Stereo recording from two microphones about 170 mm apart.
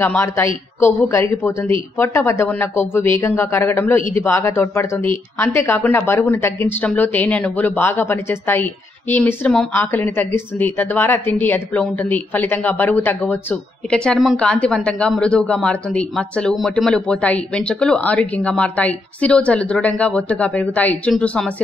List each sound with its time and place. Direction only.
0.0 s speech: 15° left (ahead or behind)